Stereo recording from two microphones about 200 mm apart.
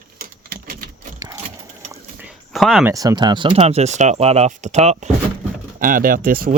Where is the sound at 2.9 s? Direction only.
15° right (ahead or behind); by 6.5 s 45° right (ahead or behind).